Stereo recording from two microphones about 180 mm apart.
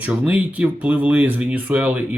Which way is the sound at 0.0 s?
10° right (ahead or behind).